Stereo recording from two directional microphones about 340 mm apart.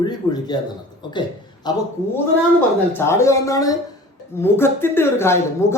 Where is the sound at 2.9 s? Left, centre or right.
Centre.